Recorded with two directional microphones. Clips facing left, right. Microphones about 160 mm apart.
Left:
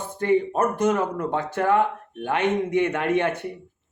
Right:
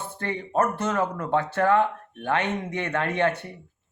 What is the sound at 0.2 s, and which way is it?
Speech, 15° left (ahead or behind).